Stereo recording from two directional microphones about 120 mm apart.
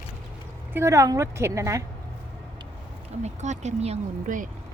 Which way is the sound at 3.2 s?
75° right (ahead or behind).